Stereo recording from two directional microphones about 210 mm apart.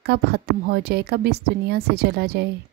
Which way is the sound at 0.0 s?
50° right (ahead or behind).